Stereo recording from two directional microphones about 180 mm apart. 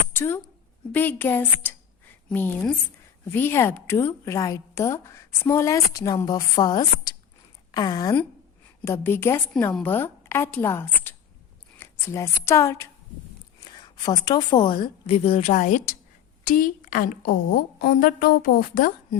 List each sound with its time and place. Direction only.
0.1 s a woman's voice: 15° left (ahead or behind); by 18.9 s 50° left (ahead or behind)